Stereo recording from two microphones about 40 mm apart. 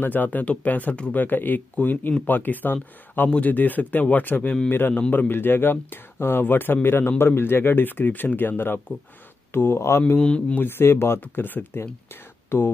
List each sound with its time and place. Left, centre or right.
0.0 s speech: left
4.6 s speech: left
9.5 s speech: left
10.1 s speech: left
10.6 s speech: left
11.3 s speech: left
12.4 s speech: left